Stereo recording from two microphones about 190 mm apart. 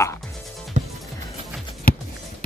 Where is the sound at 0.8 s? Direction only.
35° right (ahead or behind).